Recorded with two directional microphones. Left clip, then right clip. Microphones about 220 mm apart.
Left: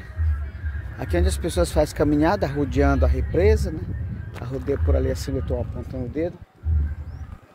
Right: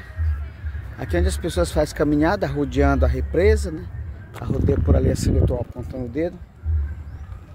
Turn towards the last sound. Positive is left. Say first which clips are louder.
# right 2 dB
turn(degrees=-20)  # may be behind; listen again after turning